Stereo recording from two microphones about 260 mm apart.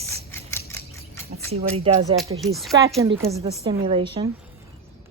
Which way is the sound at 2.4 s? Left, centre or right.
Centre.